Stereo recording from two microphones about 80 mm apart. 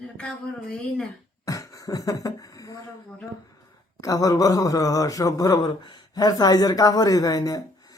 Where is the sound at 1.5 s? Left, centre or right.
Left.